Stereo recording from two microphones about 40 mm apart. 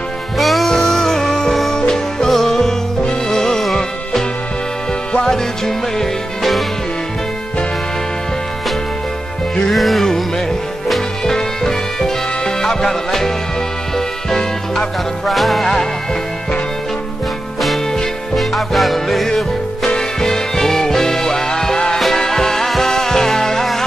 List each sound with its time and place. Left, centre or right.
0.4 s music: centre
0.7 s music: centre
5.1 s music: centre
9.7 s music: centre
11.3 s music: centre
15.2 s music: centre
18.3 s music: centre